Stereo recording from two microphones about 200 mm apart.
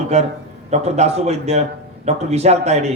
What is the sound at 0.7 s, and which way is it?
A man's voice, 35° right (ahead or behind).